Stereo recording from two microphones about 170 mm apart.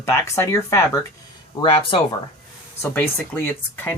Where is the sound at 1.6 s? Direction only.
30° left (ahead or behind).